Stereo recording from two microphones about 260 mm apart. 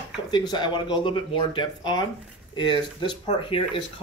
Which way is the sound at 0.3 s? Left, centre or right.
Centre.